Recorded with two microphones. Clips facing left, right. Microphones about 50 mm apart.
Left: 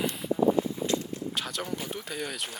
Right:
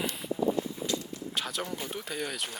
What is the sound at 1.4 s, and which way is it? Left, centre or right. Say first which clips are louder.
Speech: right 2 dB; centre.